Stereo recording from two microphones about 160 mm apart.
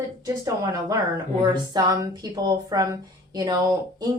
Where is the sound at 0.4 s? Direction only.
20° right (ahead or behind).